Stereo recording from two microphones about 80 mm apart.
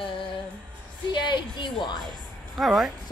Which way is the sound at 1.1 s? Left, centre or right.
Left.